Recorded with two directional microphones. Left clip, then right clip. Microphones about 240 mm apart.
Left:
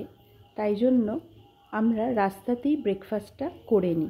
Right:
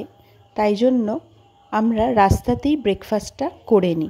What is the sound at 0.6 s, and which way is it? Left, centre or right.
A woman's voice, right.